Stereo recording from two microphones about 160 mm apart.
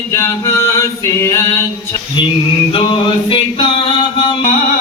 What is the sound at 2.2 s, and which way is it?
Music, 30° left (ahead or behind).